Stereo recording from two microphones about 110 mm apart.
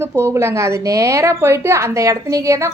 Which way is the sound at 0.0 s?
25° right (ahead or behind).